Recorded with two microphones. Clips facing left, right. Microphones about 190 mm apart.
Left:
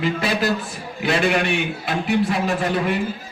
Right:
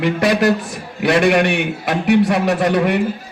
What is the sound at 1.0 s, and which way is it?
A man's voice, 70° right (ahead or behind).